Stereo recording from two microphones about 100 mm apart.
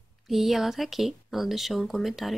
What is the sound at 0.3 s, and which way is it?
Speech, centre (ahead or behind).